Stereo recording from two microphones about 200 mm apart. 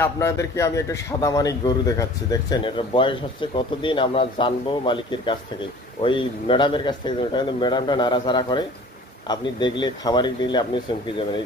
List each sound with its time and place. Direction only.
0.0 s a man's voice: 15° left (ahead or behind)